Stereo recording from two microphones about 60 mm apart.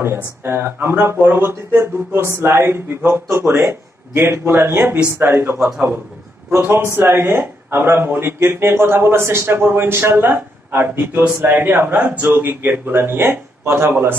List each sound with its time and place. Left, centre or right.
0.0 s a man's voice: right
5.6 s a man's voice: centre
6.6 s a man's voice: right